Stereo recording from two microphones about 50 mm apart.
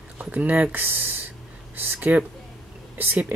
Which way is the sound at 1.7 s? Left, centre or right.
Right.